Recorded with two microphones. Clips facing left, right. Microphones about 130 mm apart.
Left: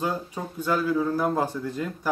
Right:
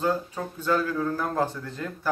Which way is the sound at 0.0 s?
10° left (ahead or behind).